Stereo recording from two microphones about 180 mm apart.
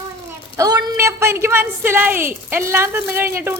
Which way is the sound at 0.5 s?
20° right (ahead or behind).